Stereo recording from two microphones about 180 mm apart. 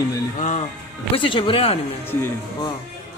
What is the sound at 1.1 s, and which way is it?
Speech, 30° left (ahead or behind).